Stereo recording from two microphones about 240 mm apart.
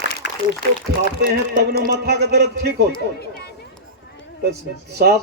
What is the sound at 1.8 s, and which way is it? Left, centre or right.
A man's voice, right.